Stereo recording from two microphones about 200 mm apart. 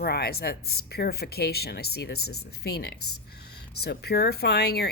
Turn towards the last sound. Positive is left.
turn(degrees=55)  # may be behind; listen again after turning